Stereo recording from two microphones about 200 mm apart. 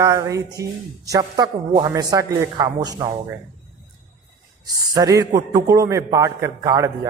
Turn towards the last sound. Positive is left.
turn(degrees=-15)  # may be behind; listen again after turning